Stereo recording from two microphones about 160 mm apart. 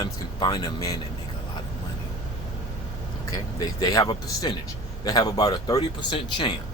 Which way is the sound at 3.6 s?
25° left (ahead or behind).